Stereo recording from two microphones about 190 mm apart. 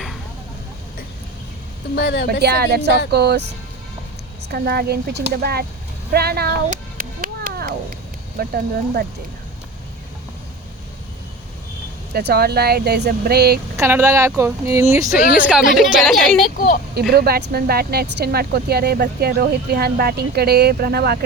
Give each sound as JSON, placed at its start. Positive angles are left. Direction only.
{"t": 2.0, "sound": "speech", "side_deg": 55}
{"t": 2.4, "sound": "speech", "side_deg": -60}
{"t": 4.4, "sound": "speech", "side_deg": -55}
{"t": 6.7, "sound": "a sound", "side_deg": -50}
{"t": 8.4, "sound": "speech", "side_deg": -55}
{"t": 12.1, "sound": "speech", "side_deg": -55}
{"t": 13.7, "sound": "speech", "side_deg": -15}
{"t": 15.2, "sound": "speech", "side_deg": 45}
{"t": 15.7, "sound": "a woman's voice", "side_deg": 0}
{"t": 16.6, "sound": "speech", "side_deg": 45}
{"t": 16.9, "sound": "speech", "side_deg": -55}